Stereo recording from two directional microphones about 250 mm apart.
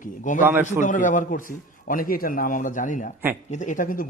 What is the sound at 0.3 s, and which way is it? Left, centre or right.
A man's voice, left.